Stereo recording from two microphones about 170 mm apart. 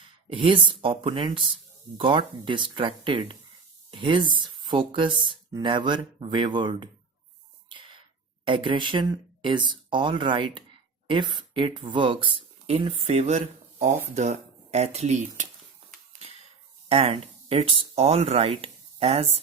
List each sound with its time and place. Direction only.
0.3 s speech: 30° right (ahead or behind)
8.4 s speech: 30° right (ahead or behind)
16.9 s speech: 35° right (ahead or behind)